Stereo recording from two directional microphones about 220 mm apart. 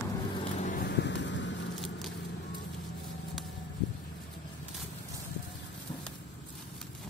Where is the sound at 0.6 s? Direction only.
40° left (ahead or behind); by 1.7 s 55° left (ahead or behind).